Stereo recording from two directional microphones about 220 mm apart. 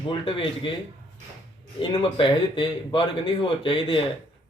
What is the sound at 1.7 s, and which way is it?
Speech, 25° left (ahead or behind).